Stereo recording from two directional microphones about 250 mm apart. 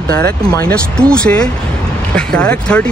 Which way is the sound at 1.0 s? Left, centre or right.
Centre.